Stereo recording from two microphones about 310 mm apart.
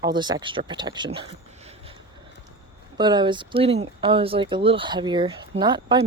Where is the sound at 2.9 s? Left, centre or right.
Centre.